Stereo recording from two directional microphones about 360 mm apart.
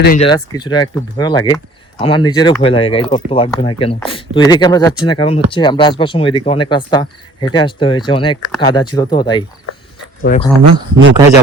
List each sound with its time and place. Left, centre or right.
0.0 s speech: left
0.3 s speech: centre